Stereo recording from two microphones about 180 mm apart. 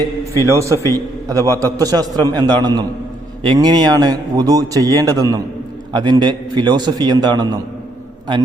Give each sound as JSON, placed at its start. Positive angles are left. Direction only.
{"t": 0.4, "sound": "a man's voice", "side_deg": -15}
{"t": 0.8, "sound": "a man's voice", "side_deg": 15}
{"t": 1.3, "sound": "speech", "side_deg": -15}